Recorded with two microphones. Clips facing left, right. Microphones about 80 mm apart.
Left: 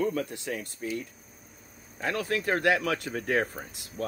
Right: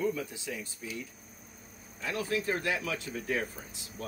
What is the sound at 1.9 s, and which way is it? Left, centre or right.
Speech, left.